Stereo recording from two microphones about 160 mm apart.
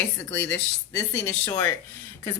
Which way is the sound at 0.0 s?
15° left (ahead or behind).